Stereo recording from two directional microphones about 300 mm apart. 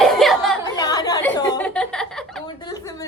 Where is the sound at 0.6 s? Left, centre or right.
Centre.